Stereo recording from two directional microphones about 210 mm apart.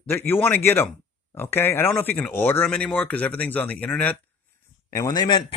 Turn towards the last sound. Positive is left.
turn(degrees=20)  # may be behind; listen again after turning